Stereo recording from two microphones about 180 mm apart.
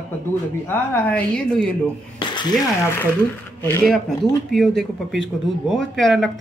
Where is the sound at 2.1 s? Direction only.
25° left (ahead or behind).